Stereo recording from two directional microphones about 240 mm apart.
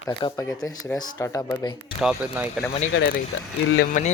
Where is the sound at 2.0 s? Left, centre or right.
Centre.